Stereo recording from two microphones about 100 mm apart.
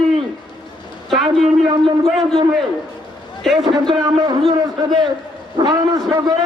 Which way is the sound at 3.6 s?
40° right (ahead or behind).